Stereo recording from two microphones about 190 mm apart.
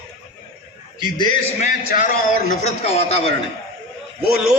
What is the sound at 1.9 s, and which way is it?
Speech, 50° left (ahead or behind).